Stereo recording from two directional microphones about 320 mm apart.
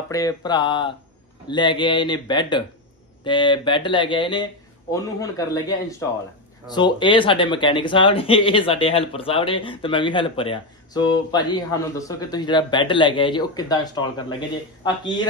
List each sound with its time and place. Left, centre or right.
0.1 s speech: centre